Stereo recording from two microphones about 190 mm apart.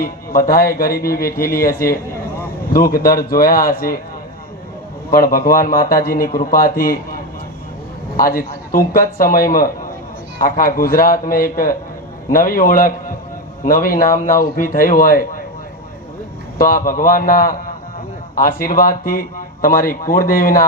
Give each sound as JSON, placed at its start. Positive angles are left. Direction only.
{"t": 0.0, "sound": "a man's voice", "side_deg": 50}
{"t": 5.1, "sound": "a man's voice", "side_deg": 50}
{"t": 16.6, "sound": "a man's voice", "side_deg": 50}